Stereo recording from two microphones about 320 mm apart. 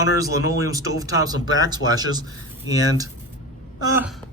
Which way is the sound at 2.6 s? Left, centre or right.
Left.